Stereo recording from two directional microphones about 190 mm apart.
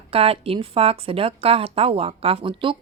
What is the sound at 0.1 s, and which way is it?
Speech, 30° right (ahead or behind).